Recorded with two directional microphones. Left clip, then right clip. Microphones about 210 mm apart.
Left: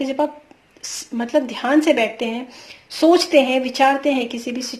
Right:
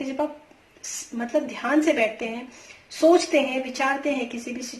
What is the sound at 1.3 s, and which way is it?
A woman's voice, 45° left (ahead or behind).